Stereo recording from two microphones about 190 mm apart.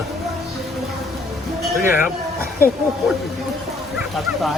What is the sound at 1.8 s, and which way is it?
Speech, 10° right (ahead or behind).